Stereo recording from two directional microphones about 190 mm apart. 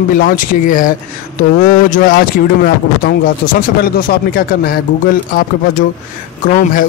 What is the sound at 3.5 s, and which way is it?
Speech, 55° left (ahead or behind).